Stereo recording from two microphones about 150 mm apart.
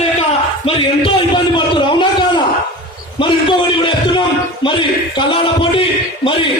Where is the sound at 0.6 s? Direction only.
35° left (ahead or behind).